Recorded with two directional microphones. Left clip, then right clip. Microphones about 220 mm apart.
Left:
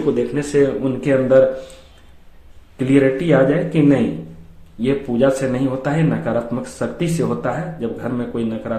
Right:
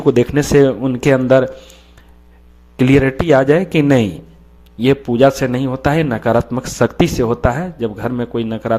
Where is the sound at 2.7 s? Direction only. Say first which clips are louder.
Right 2 dB; 50° right (ahead or behind).